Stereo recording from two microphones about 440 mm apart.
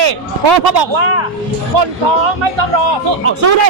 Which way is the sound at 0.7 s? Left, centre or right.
Right.